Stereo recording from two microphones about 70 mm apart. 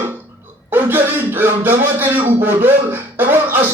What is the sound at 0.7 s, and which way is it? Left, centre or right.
Speech, right.